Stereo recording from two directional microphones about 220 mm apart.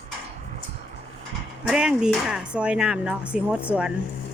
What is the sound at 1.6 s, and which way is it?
Speech, 5° right (ahead or behind).